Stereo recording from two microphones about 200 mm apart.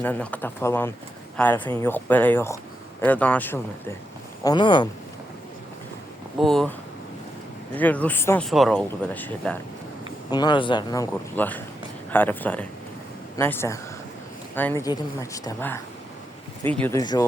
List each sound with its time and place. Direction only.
0.0 s speech: 10° left (ahead or behind)
4.4 s speech: 25° left (ahead or behind)
6.4 s speech: centre (ahead or behind)
7.8 s speech: 10° left (ahead or behind)
8.4 s speech: centre (ahead or behind)
10.0 s speech: 20° left (ahead or behind)
17.0 s speech: 20° left (ahead or behind)